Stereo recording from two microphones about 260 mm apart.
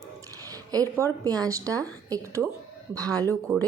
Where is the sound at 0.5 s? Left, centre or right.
Centre.